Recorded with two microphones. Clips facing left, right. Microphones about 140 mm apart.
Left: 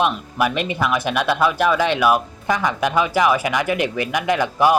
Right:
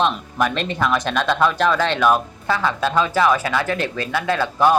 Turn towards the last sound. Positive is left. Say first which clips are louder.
# even
turn(degrees=15)  # may be behind; listen again after turning